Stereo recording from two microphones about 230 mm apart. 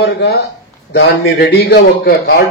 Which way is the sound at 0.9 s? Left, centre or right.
Left.